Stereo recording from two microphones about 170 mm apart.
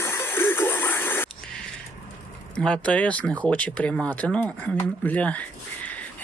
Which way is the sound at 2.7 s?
5° left (ahead or behind).